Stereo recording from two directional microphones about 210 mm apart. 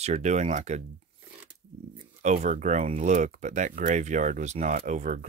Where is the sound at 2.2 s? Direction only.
35° right (ahead or behind).